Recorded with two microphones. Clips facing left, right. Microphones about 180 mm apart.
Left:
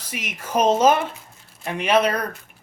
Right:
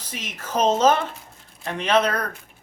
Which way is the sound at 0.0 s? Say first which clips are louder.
Left 2 dB; 10° left (ahead or behind).